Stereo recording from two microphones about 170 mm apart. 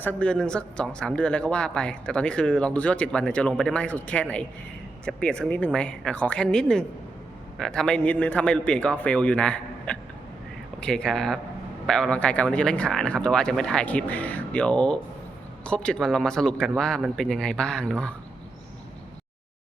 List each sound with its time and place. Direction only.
0.0 s speech: 10° left (ahead or behind)